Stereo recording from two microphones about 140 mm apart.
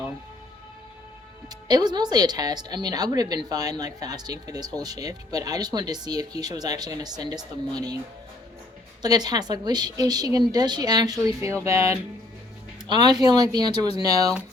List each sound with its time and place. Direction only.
1.5 s speech: 30° right (ahead or behind)
9.0 s speech: 30° right (ahead or behind)